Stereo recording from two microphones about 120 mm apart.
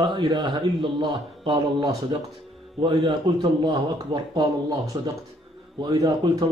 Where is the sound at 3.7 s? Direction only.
35° right (ahead or behind).